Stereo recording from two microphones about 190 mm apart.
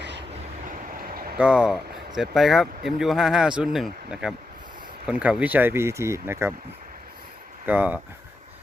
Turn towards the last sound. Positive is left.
turn(degrees=-10)  # may be behind; listen again after turning